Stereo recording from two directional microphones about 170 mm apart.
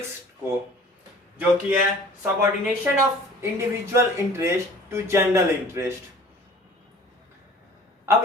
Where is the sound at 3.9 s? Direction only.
15° right (ahead or behind).